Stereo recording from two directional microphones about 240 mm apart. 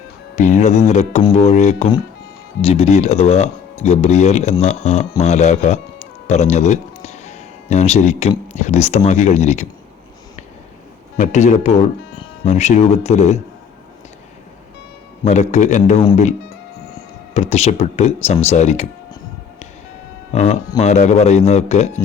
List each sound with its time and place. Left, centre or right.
0.3 s speech: left
11.2 s speech: left
15.2 s speech: left
17.3 s speech: left
20.3 s speech: left